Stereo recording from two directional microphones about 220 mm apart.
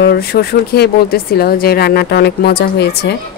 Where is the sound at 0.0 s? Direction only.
45° left (ahead or behind).